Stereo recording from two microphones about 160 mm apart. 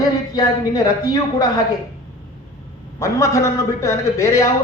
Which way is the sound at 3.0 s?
20° left (ahead or behind).